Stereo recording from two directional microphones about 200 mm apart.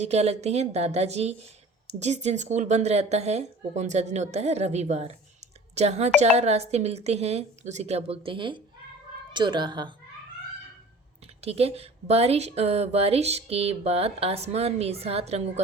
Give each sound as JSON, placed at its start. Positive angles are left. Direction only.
{"t": 0.0, "sound": "speech", "side_deg": -30}
{"t": 11.3, "sound": "speech", "side_deg": -30}